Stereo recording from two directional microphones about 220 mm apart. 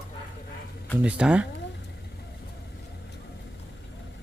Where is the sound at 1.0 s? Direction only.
5° right (ahead or behind).